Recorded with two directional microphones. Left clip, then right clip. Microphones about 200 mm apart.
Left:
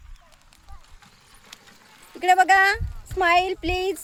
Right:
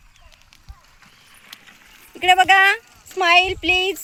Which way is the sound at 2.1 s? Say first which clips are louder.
Right 3 dB; 10° right (ahead or behind).